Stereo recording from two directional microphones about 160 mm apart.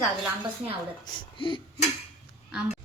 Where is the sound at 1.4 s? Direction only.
35° left (ahead or behind).